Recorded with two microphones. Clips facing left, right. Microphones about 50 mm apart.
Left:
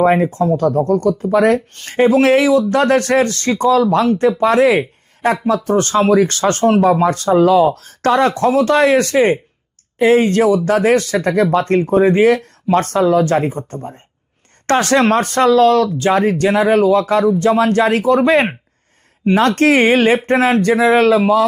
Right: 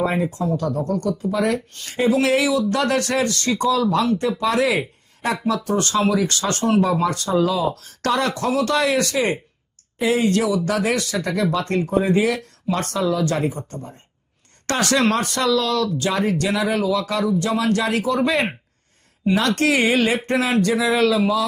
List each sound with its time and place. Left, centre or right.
0.0 s speech: left